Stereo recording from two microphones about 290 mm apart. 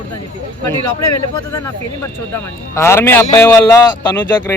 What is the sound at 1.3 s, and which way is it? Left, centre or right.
A man's voice, centre.